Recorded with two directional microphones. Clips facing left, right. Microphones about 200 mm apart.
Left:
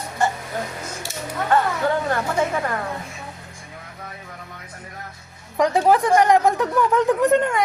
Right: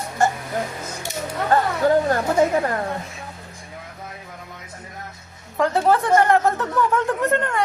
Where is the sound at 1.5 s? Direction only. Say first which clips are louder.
Right 3 dB; 40° right (ahead or behind).